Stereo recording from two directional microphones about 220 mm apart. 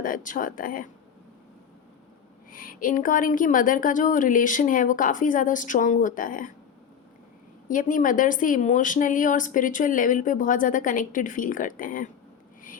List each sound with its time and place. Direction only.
0.0 s a woman's voice: 35° left (ahead or behind)
2.5 s a woman's voice: 40° left (ahead or behind)
7.7 s a woman's voice: 35° left (ahead or behind)